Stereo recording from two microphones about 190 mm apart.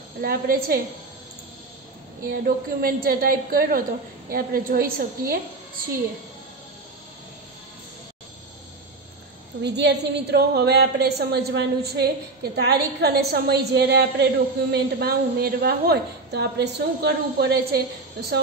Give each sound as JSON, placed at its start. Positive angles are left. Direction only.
{"t": 0.2, "sound": "a woman's voice", "side_deg": -50}
{"t": 2.2, "sound": "a woman's voice", "side_deg": -50}
{"t": 9.6, "sound": "a woman's voice", "side_deg": -65}